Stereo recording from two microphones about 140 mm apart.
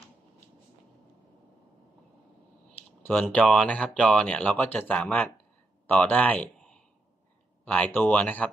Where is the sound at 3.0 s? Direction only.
10° left (ahead or behind).